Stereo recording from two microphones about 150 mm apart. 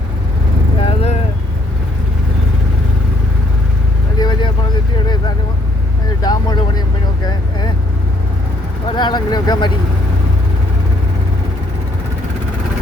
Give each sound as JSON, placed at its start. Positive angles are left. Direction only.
{"t": 0.8, "sound": "vehicle", "side_deg": 40}
{"t": 4.2, "sound": "vehicle", "side_deg": 30}
{"t": 6.2, "sound": "vehicle", "side_deg": 25}
{"t": 9.0, "sound": "speech", "side_deg": 30}